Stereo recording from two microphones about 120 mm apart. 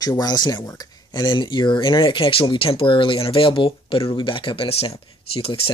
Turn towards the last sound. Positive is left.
turn(degrees=50)  # may be behind; listen again after turning